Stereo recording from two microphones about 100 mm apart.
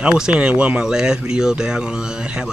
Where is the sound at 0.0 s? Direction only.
10° right (ahead or behind).